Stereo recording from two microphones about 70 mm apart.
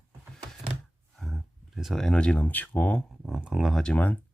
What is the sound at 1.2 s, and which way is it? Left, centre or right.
Speech, centre.